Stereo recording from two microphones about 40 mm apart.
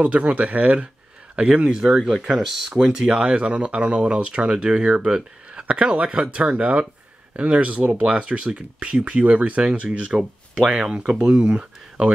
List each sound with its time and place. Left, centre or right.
0.0 s speech: right
1.8 s speech: centre; by 9.7 s right
9.9 s speech: right